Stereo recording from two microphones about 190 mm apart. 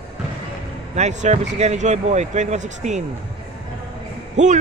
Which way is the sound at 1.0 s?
35° right (ahead or behind).